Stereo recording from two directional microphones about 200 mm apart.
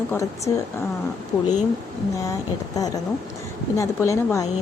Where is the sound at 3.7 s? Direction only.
15° left (ahead or behind).